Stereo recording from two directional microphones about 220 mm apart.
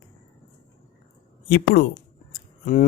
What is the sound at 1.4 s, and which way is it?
Speech, 45° left (ahead or behind).